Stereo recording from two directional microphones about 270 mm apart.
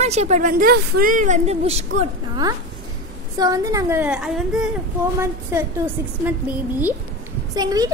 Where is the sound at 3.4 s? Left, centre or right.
Centre.